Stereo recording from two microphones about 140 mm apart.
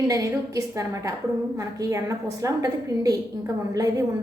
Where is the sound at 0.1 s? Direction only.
25° right (ahead or behind).